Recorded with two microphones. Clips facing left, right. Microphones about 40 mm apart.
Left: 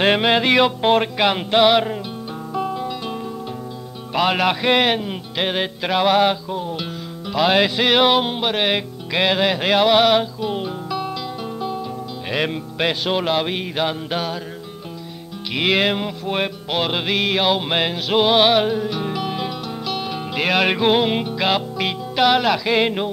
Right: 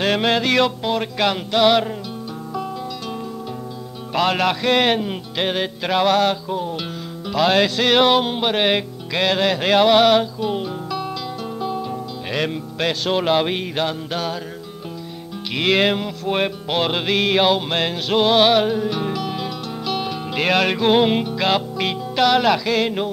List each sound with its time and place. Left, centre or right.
0.2 s music: left
4.1 s music: centre
7.3 s music: centre
9.1 s music: centre
12.3 s music: centre
13.2 s music: centre
13.8 s music: centre
15.5 s music: centre
17.6 s music: centre
19.1 s music: centre
19.9 s music: centre
20.6 s music: centre
20.9 s music: centre
22.7 s music: left